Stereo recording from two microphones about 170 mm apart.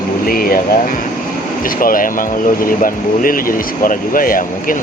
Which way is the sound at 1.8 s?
55° left (ahead or behind).